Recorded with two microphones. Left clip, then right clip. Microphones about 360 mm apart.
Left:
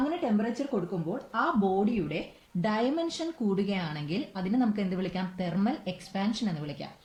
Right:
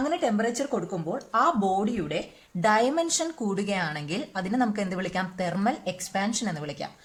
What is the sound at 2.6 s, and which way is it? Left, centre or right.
Speech, right.